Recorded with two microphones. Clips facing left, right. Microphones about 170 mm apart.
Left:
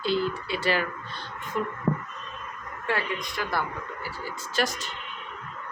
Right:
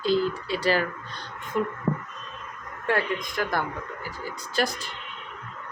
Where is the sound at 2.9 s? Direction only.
50° right (ahead or behind).